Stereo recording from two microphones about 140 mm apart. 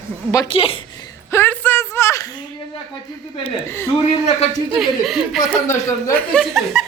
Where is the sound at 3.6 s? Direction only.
20° left (ahead or behind).